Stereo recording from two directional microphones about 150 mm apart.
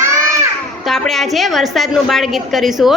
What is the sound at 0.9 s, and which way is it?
A woman's voice, centre (ahead or behind).